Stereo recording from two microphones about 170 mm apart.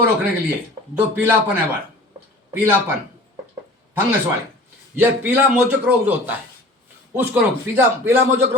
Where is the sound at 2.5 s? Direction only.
10° right (ahead or behind).